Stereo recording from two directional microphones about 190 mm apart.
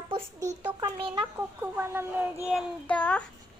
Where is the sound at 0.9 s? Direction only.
30° right (ahead or behind).